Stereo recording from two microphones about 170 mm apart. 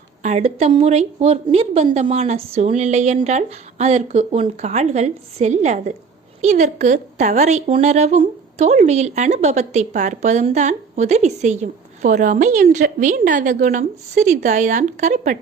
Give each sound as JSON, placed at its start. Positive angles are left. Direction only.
{"t": 0.2, "sound": "a woman's voice", "side_deg": -40}